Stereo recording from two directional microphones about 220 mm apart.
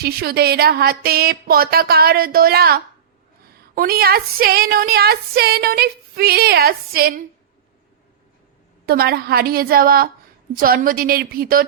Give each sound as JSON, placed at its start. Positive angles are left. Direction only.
{"t": 0.0, "sound": "speech", "side_deg": -45}
{"t": 8.9, "sound": "a woman's voice", "side_deg": -45}